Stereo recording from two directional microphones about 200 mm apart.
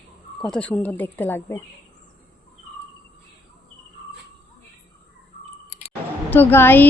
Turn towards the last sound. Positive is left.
turn(degrees=10)  # may be behind; listen again after turning